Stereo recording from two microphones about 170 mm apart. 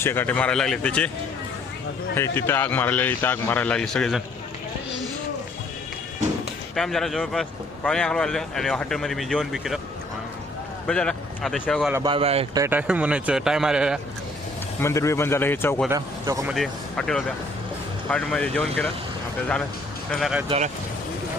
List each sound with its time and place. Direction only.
0.0 s a man's voice: 15° left (ahead or behind)
2.1 s a man's voice: 15° left (ahead or behind)
6.7 s speech: centre (ahead or behind)
10.8 s speech: 5° left (ahead or behind)
12.0 s speech: 35° right (ahead or behind)
12.5 s speech: 15° right (ahead or behind)
14.8 s a man's voice: 15° left (ahead or behind)
15.9 s speech: 20° right (ahead or behind)
16.5 s speech: centre (ahead or behind)
20.1 s speech: centre (ahead or behind)